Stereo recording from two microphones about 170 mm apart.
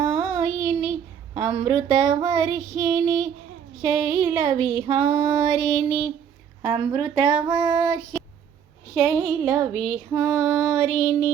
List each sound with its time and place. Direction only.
0.0 s a sound: 25° right (ahead or behind)
3.8 s female singing: 20° right (ahead or behind)
9.0 s female singing: 10° right (ahead or behind)